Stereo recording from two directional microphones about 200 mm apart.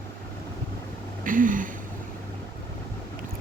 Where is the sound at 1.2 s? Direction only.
40° right (ahead or behind).